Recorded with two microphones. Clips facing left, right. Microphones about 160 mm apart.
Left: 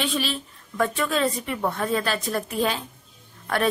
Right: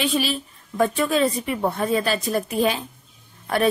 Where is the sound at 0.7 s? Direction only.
20° right (ahead or behind).